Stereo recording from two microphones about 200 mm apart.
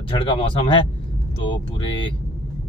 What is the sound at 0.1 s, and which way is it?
Speech, 25° left (ahead or behind).